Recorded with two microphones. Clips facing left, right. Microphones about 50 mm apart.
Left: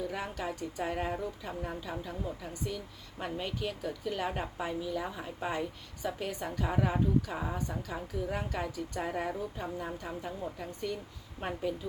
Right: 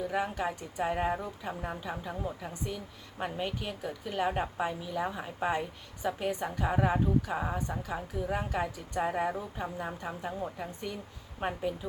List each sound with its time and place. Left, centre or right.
0.1 s a woman's voice: centre